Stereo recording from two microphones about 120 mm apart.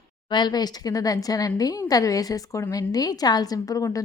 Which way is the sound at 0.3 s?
40° left (ahead or behind).